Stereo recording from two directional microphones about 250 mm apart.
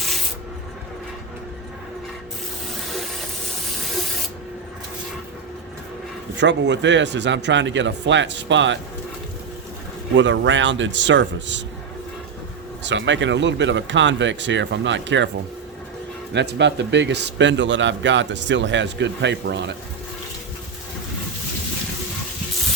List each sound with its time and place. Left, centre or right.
6.4 s a man's voice: right
10.2 s a man's voice: right
12.8 s a man's voice: right
16.3 s a man's voice: right